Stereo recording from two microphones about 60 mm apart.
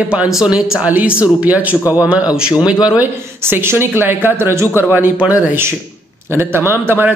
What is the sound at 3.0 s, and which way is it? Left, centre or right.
Speech, right.